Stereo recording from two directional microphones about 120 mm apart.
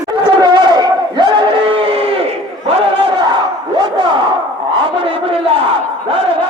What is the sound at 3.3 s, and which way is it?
Crowd, 35° right (ahead or behind).